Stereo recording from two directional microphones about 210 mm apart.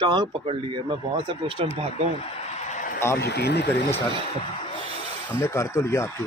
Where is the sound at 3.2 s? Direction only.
50° left (ahead or behind).